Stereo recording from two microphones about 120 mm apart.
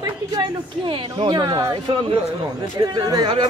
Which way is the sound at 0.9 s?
45° right (ahead or behind).